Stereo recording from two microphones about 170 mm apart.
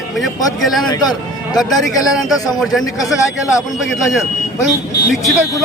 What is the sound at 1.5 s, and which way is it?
Speech, 20° left (ahead or behind).